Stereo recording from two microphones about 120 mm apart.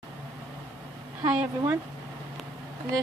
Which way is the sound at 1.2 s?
15° right (ahead or behind).